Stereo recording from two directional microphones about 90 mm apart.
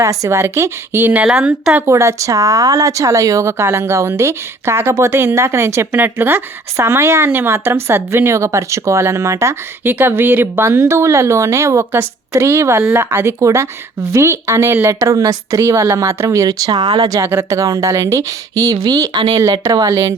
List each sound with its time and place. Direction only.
0.0 s speech: 35° right (ahead or behind)
1.2 s speech: 10° right (ahead or behind)
1.9 s speech: 30° right (ahead or behind)
17.2 s speech: 30° right (ahead or behind); by 19.4 s 50° right (ahead or behind)
19.4 s speech: 35° right (ahead or behind)